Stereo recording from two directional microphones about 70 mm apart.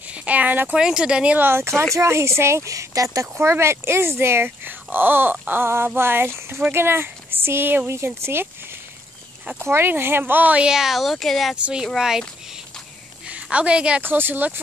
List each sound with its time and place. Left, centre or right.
0.2 s speech: right
0.7 s speech: centre
1.4 s speech: right
3.3 s speech: right
9.6 s speech: right
10.7 s speech: centre
11.5 s speech: centre
13.3 s a woman's voice: centre
14.0 s speech: right